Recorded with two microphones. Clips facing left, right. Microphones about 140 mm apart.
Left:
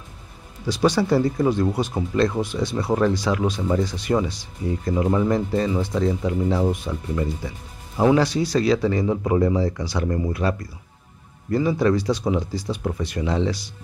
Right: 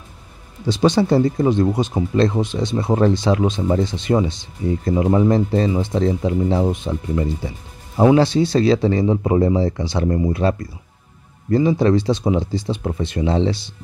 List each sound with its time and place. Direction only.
0.7 s speech: 25° right (ahead or behind)
11.5 s speech: 25° right (ahead or behind)